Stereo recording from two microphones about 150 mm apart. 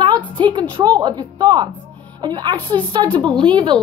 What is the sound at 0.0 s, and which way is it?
A woman's voice, 30° right (ahead or behind).